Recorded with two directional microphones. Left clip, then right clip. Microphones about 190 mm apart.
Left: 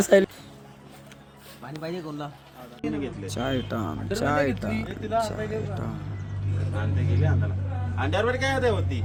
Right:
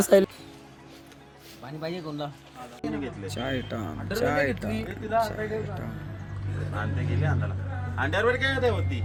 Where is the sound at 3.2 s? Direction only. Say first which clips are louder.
Left 3 dB; 25° left (ahead or behind).